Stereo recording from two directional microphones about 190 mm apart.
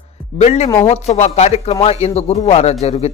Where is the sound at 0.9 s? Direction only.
35° left (ahead or behind).